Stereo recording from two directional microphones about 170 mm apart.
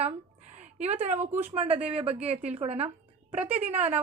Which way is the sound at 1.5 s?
40° right (ahead or behind).